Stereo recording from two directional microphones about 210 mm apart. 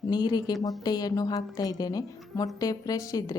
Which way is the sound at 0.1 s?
20° left (ahead or behind).